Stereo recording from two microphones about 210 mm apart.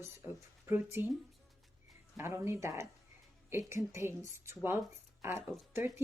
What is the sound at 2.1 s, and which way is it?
Speech, 10° right (ahead or behind).